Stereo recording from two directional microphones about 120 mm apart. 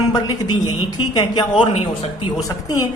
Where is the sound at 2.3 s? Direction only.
30° left (ahead or behind).